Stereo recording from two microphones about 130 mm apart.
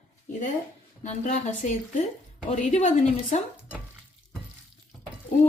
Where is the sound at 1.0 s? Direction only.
65° left (ahead or behind).